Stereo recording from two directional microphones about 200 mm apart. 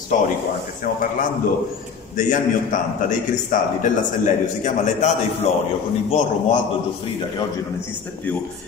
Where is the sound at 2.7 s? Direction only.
40° left (ahead or behind).